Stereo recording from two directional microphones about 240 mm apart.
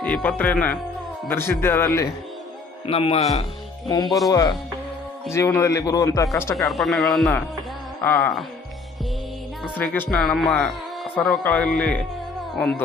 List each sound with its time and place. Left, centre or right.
0.0 s a man's voice: centre
2.8 s a man's voice: left
3.8 s a man's voice: centre
9.7 s a man's voice: centre